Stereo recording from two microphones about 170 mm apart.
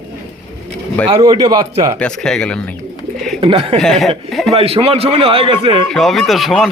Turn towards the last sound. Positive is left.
turn(degrees=0)  # may be behind; listen again after turning